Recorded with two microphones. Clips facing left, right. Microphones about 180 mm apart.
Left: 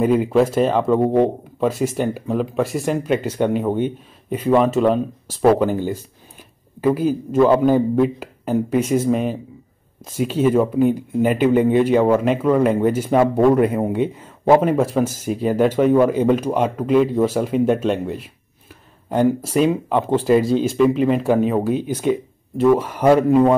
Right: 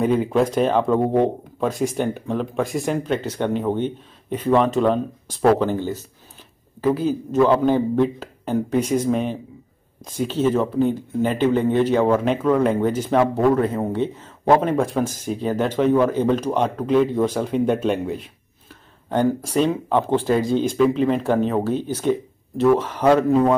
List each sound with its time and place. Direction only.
0.0 s speech: 5° left (ahead or behind)
6.8 s speech: 10° left (ahead or behind)